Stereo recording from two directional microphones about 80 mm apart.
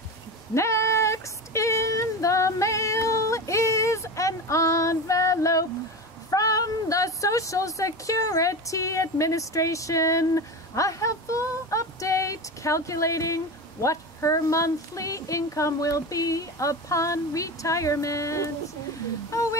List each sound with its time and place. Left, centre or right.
0.6 s female singing: left
6.3 s a woman's voice: left
19.3 s humming: left